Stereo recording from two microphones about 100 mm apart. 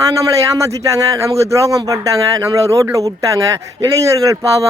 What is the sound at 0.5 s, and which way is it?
Speech, 35° right (ahead or behind).